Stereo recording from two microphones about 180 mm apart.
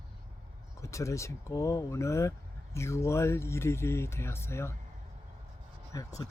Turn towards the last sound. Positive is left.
turn(degrees=20)  # may be behind; listen again after turning